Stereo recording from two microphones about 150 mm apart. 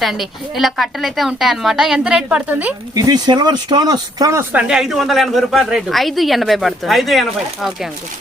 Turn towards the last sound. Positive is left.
turn(degrees=0)  # may be behind; listen again after turning